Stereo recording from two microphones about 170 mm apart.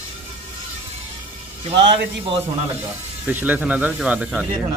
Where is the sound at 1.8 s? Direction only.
90° right.